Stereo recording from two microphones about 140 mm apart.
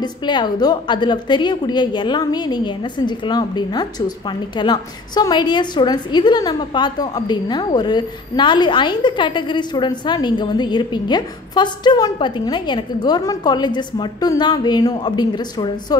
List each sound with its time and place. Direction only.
0.0 s a woman's voice: 30° left (ahead or behind)